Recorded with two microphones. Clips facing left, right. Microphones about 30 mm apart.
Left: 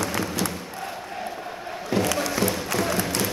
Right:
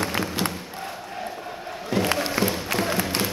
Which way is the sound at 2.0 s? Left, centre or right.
Right.